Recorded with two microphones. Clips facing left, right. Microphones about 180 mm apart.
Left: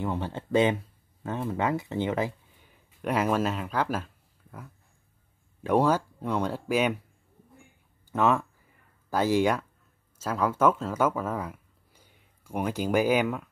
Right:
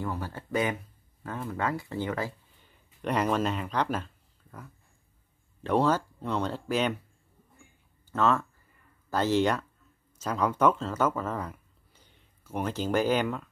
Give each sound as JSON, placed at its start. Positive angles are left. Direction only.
{"t": 0.0, "sound": "speech", "side_deg": 25}
{"t": 2.6, "sound": "a sound", "side_deg": 5}
{"t": 5.6, "sound": "speech", "side_deg": 10}
{"t": 8.1, "sound": "speech", "side_deg": 15}